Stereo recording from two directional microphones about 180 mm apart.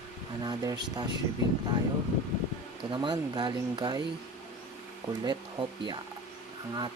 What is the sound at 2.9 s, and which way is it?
Speech, 25° right (ahead or behind).